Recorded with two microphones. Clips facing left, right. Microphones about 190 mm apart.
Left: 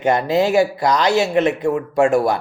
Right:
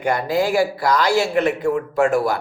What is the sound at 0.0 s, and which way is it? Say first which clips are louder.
Speech: left 3 dB; 20° left (ahead or behind).